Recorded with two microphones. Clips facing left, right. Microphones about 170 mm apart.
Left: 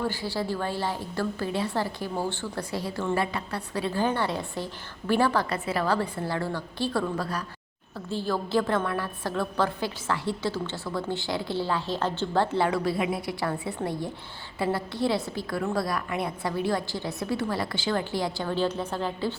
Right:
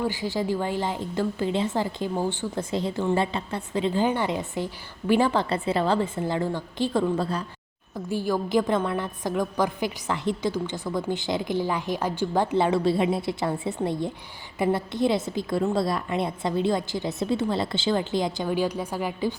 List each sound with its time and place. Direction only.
0.0 s a woman's voice: 15° right (ahead or behind)
7.9 s a woman's voice: 15° right (ahead or behind)